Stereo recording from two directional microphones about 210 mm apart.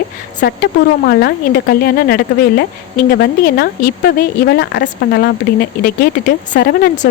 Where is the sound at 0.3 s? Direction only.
50° left (ahead or behind).